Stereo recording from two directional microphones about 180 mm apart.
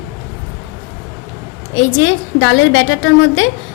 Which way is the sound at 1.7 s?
90° left.